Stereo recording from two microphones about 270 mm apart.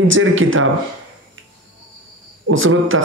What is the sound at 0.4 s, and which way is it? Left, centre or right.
Speech, right.